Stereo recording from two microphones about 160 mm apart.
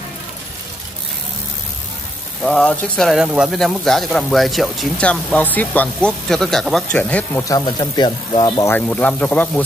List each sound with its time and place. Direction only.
2.4 s speech: 5° left (ahead or behind)
7.4 s speech: 25° left (ahead or behind); by 9.5 s 10° left (ahead or behind)